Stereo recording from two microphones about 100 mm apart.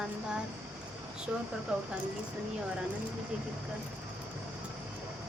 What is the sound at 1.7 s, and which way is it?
Speech, 10° right (ahead or behind).